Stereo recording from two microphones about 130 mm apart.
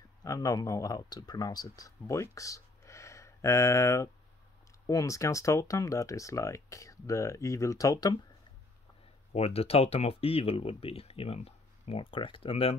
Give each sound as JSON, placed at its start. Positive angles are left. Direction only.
{"t": 0.2, "sound": "speech", "side_deg": 25}
{"t": 9.3, "sound": "speech", "side_deg": 50}